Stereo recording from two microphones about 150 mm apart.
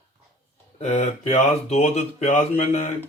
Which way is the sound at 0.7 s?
50° left (ahead or behind).